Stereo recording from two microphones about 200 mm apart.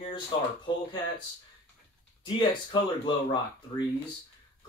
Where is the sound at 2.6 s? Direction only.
20° left (ahead or behind).